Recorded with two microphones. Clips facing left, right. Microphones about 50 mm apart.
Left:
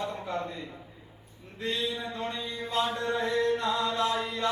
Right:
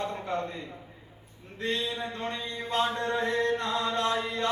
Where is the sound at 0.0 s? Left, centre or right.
Right.